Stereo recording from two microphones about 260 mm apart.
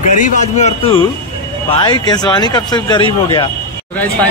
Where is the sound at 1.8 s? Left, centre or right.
Centre.